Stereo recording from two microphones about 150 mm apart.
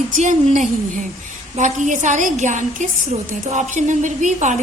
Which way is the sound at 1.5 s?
55° right (ahead or behind).